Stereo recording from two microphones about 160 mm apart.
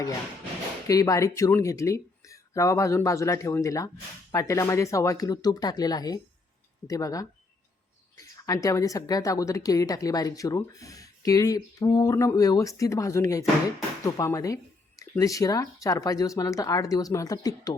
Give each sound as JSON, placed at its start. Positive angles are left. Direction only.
{"t": 0.9, "sound": "speech", "side_deg": 20}
{"t": 8.4, "sound": "speech", "side_deg": 20}